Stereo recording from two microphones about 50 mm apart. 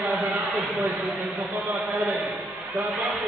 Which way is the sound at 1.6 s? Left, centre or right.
Right.